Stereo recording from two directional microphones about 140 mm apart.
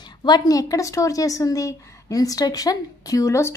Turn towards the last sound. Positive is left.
turn(degrees=20)  # may be behind; listen again after turning